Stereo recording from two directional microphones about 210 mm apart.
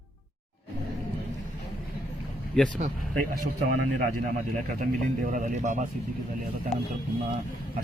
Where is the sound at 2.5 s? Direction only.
5° left (ahead or behind).